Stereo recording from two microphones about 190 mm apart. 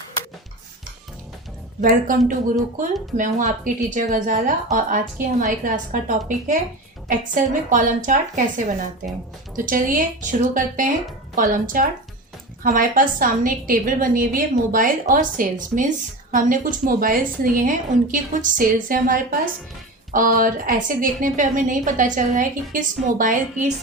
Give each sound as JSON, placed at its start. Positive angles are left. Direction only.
{"t": 1.8, "sound": "a woman's voice", "side_deg": -45}
{"t": 3.2, "sound": "a woman's voice", "side_deg": -40}
{"t": 9.6, "sound": "a woman's voice", "side_deg": -45}